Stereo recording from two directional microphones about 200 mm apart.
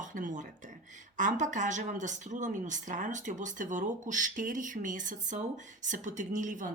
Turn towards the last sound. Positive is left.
turn(degrees=-40)  # may be behind; listen again after turning